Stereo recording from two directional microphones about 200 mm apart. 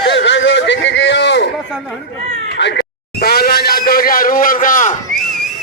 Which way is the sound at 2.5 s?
60° left (ahead or behind).